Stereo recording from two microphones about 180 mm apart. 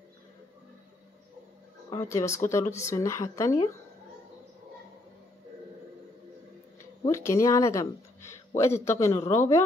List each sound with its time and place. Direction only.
1.9 s speech: 15° left (ahead or behind)
7.1 s speech: 15° left (ahead or behind)